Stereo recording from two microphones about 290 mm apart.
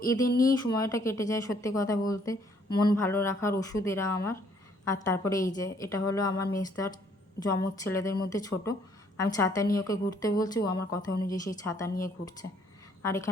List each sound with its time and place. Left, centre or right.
0.0 s speech: centre
0.3 s speech: left
0.7 s speech: centre
13.0 s a woman's voice: centre